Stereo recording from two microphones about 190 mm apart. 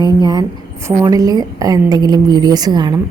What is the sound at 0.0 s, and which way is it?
A woman's voice, 20° right (ahead or behind).